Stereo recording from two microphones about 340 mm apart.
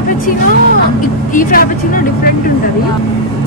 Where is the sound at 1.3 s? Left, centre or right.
Left.